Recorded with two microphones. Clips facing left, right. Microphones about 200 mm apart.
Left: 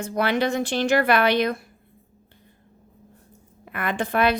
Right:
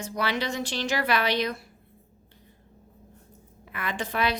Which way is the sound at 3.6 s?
55° left (ahead or behind).